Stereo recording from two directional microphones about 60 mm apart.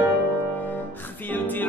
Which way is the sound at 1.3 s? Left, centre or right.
Left.